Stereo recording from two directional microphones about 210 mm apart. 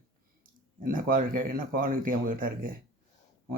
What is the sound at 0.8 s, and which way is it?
Speech, 40° right (ahead or behind).